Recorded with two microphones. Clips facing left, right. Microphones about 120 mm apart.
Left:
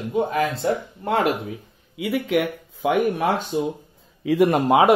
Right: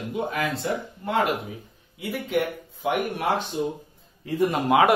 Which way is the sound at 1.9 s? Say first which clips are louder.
Left 5 dB; 90° left.